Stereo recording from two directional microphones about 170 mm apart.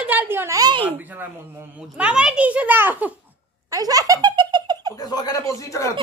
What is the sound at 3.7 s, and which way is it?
Giggle, 20° right (ahead or behind).